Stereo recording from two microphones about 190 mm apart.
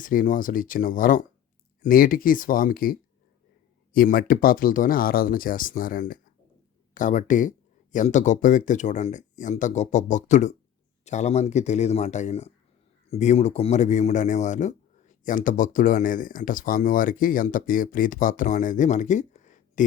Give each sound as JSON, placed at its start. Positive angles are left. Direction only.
{"t": 0.0, "sound": "a man's voice", "side_deg": 45}